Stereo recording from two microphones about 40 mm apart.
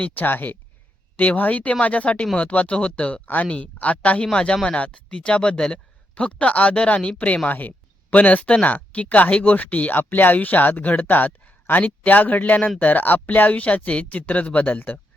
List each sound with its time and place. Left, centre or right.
0.2 s speech: left
1.4 s speech: left
4.3 s speech: centre
7.4 s speech: left